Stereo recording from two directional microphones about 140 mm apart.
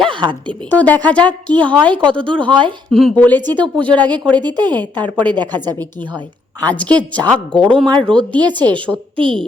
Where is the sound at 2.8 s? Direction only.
5° left (ahead or behind).